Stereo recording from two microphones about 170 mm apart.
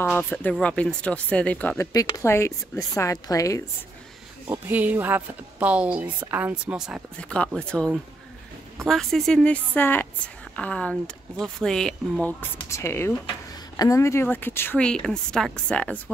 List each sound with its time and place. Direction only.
0.0 s speech: 10° left (ahead or behind)
1.9 s a woman's voice: 20° left (ahead or behind)
4.5 s speech: 10° right (ahead or behind)
7.2 s a woman's voice: 5° left (ahead or behind)